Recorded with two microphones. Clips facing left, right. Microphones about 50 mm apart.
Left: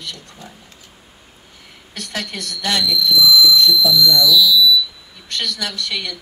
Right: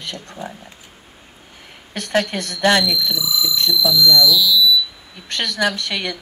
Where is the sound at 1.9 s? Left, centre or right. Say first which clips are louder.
Right 8 dB; right.